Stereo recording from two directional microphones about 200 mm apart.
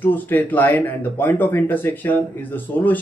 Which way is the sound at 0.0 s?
10° left (ahead or behind).